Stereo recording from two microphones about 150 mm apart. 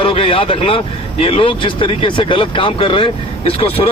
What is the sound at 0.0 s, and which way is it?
Speech, 35° left (ahead or behind).